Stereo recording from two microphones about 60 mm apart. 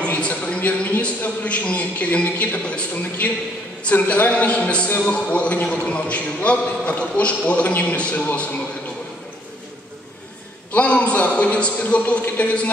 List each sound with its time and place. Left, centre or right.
0.0 s a sound: left
0.6 s speech: left
10.7 s speech: left